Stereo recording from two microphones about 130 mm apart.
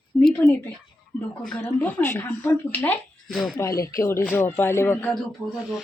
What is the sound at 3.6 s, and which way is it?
Speech, 25° left (ahead or behind).